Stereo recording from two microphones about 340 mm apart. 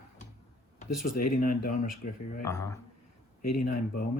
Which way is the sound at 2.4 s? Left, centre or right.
Centre.